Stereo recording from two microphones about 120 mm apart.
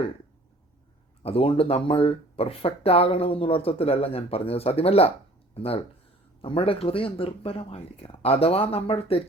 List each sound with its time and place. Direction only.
1.2 s speech: 50° left (ahead or behind)